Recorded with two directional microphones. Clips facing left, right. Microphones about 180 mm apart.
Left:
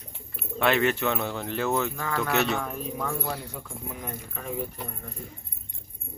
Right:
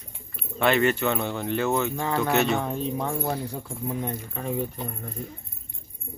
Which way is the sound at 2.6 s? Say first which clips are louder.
Right 4 dB; 25° right (ahead or behind).